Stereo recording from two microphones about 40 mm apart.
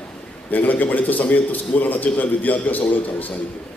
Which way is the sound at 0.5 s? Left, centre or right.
Left.